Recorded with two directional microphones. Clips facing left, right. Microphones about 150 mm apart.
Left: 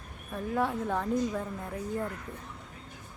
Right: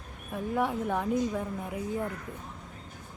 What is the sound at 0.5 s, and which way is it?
A woman's voice, 10° right (ahead or behind).